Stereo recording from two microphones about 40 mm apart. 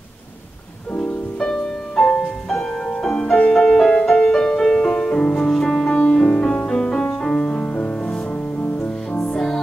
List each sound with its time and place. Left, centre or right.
1.4 s music: centre
4.8 s music: left
6.2 s music: left
6.5 s music: centre
8.0 s music: left
8.7 s music: left
9.2 s music: centre